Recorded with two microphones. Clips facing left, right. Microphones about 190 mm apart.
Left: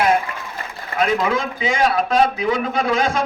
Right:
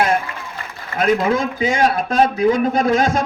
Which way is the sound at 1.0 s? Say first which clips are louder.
Right 3 dB; 45° right (ahead or behind).